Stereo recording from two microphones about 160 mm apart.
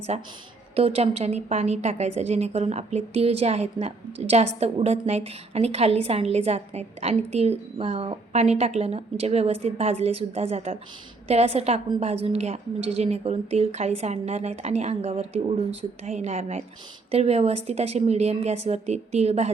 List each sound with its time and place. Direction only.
0.1 s a woman's voice: 45° right (ahead or behind)